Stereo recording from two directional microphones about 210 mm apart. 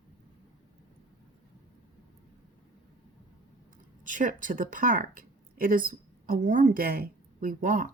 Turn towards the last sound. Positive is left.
turn(degrees=-40)  # may be behind; listen again after turning